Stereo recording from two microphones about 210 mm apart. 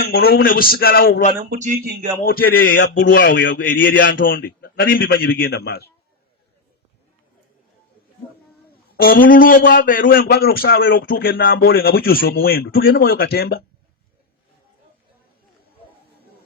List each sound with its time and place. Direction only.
0.0 s a man's voice: 50° left (ahead or behind)
1.5 s speech: 40° right (ahead or behind)
2.2 s a man's voice: 45° left (ahead or behind)
9.0 s a man's voice: 45° left (ahead or behind)